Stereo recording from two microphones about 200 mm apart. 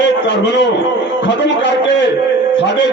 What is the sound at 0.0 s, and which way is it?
A man's voice, 60° left (ahead or behind).